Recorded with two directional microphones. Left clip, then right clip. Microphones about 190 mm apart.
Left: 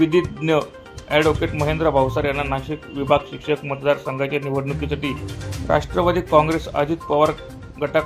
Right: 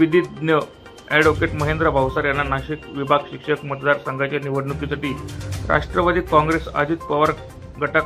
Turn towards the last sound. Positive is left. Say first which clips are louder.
# right 1 dB
turn(degrees=15)  # may be behind; listen again after turning